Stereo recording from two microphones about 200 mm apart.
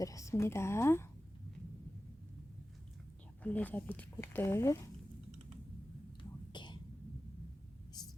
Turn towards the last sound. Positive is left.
turn(degrees=25)  # may be behind; listen again after turning